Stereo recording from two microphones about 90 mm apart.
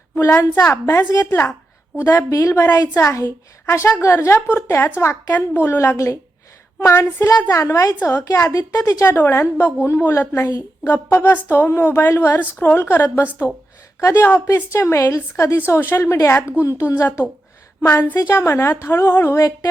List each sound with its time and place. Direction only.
0.3 s a woman's voice: 20° left (ahead or behind); by 9.0 s 35° left (ahead or behind)
9.0 s a woman's voice: 25° left (ahead or behind)
10.8 s a woman's voice: 20° left (ahead or behind)